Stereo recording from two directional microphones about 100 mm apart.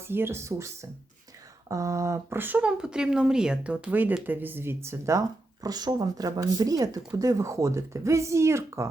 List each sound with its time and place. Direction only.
0.1 s speech: 25° right (ahead or behind)
5.6 s speech: 40° right (ahead or behind)